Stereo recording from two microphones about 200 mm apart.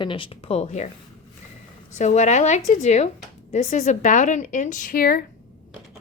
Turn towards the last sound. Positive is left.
turn(degrees=45)  # may be behind; listen again after turning